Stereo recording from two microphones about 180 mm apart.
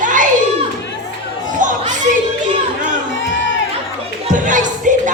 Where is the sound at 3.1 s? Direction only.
90° left.